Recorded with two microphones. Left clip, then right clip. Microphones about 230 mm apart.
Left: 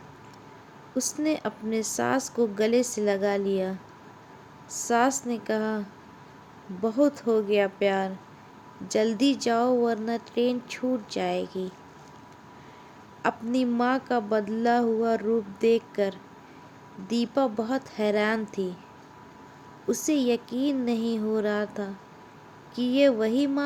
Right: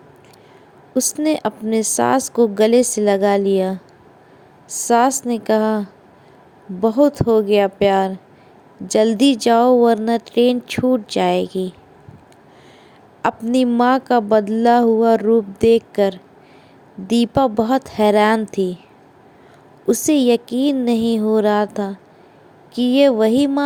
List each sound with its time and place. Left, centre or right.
0.9 s a woman's voice: right
13.2 s a woman's voice: right
19.9 s a woman's voice: right